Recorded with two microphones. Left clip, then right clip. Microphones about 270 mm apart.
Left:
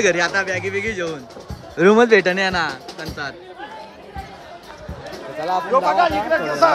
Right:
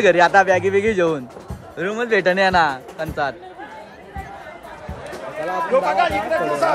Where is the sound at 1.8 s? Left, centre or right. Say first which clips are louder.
Left 7 dB; centre.